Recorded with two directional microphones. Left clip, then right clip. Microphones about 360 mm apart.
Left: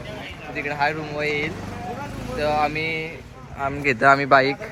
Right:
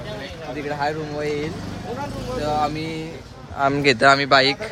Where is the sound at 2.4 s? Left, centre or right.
Centre.